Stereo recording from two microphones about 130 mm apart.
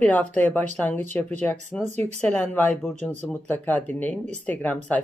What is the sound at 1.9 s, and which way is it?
Speech, 60° right (ahead or behind).